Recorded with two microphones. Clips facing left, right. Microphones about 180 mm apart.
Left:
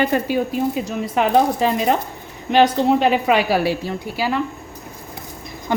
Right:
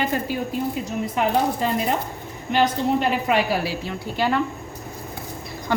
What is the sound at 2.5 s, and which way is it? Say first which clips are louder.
A woman's voice: left 5 dB; 90° left.